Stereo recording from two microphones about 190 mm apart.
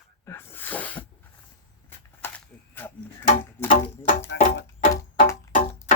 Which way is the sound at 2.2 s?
10° left (ahead or behind).